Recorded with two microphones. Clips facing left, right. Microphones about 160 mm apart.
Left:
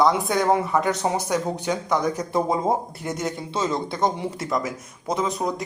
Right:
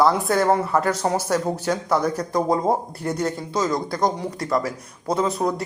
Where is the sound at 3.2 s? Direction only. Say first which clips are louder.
Right 2 dB; 25° left (ahead or behind).